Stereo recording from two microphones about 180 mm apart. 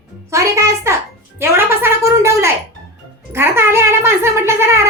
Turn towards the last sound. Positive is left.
turn(degrees=-15)  # may be behind; listen again after turning